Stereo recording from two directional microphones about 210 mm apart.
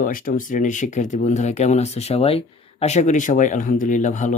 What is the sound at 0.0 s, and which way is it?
Speech, 40° left (ahead or behind).